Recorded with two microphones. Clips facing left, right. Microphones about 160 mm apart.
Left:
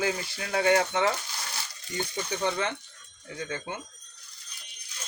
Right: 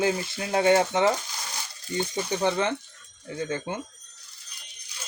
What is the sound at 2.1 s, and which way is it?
Speech, 30° right (ahead or behind).